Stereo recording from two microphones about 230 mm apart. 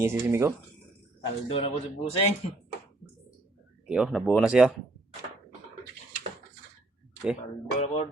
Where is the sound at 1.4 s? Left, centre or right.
Left.